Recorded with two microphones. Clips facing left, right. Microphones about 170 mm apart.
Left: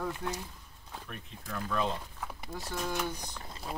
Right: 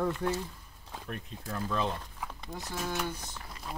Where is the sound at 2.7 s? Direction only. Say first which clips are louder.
Even; 5° right (ahead or behind).